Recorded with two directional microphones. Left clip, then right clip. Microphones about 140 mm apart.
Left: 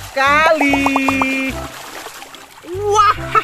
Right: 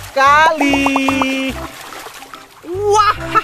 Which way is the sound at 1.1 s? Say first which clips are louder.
Even; 30° right (ahead or behind).